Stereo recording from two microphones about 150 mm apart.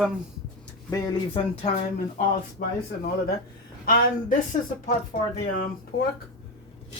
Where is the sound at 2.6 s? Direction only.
85° left.